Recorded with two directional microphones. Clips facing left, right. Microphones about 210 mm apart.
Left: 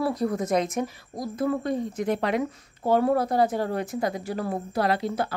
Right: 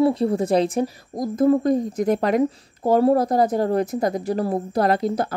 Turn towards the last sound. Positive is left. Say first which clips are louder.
# right 5 dB
turn(degrees=-40)  # may be behind; listen again after turning